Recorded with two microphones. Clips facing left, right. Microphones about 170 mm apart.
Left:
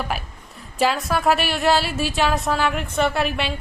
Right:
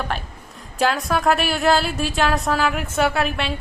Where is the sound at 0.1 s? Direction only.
5° left (ahead or behind).